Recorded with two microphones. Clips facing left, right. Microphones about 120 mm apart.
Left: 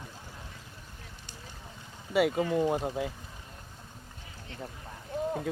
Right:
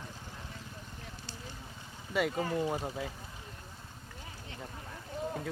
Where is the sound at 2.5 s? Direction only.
15° left (ahead or behind).